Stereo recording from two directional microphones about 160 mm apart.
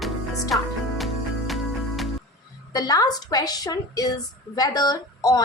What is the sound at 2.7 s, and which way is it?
A woman's voice, 25° left (ahead or behind).